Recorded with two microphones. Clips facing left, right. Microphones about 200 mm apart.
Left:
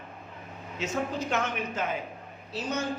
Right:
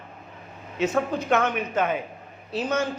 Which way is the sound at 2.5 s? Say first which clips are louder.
Right 6 dB; 75° right (ahead or behind).